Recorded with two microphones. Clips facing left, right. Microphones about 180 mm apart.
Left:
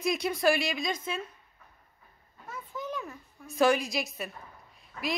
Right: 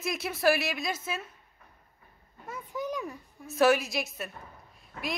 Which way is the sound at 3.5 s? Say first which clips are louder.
Right 1 dB; 5° right (ahead or behind).